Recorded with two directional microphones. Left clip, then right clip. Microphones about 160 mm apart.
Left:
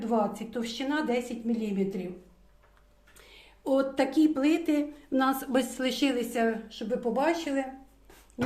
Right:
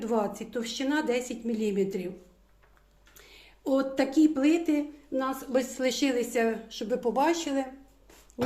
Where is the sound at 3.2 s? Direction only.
10° right (ahead or behind).